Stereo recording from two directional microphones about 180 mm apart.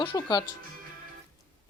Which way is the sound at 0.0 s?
25° left (ahead or behind).